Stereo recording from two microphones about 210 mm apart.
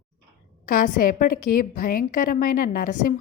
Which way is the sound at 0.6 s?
40° left (ahead or behind).